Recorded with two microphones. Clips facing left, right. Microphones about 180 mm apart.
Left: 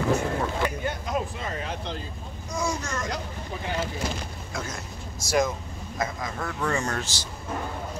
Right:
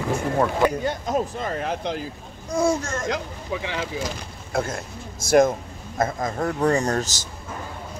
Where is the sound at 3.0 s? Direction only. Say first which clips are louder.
Right 5 dB; 90° right.